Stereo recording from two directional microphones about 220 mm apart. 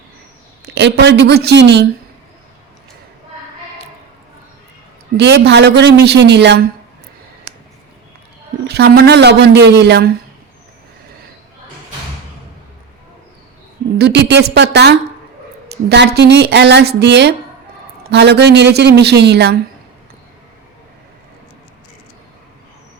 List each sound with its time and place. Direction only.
0.7 s a woman's voice: 50° right (ahead or behind)
5.1 s a woman's voice: 50° right (ahead or behind)
7.5 s a sound: 50° right (ahead or behind)
8.6 s a woman's voice: 50° right (ahead or behind)
14.0 s a woman's voice: 50° right (ahead or behind)